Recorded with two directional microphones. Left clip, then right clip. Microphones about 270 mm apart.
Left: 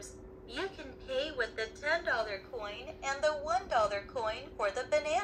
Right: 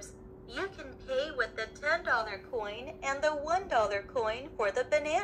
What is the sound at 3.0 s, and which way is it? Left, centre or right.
A woman's voice, right.